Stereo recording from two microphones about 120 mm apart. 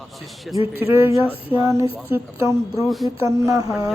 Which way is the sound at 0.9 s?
25° right (ahead or behind).